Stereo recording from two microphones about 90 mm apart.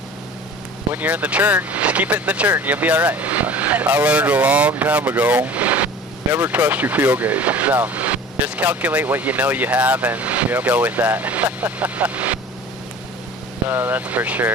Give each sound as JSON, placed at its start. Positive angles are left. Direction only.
{"t": 0.9, "sound": "speech", "side_deg": -15}
{"t": 13.7, "sound": "speech", "side_deg": -20}